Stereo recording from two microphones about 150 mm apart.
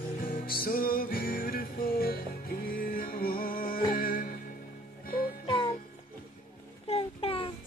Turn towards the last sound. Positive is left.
turn(degrees=35)  # may be behind; listen again after turning